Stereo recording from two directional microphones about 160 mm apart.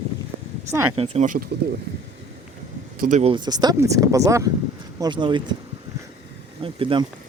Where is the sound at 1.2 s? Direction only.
55° right (ahead or behind).